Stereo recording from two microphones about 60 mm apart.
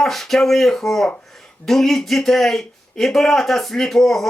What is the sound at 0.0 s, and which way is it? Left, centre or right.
A man's voice, centre.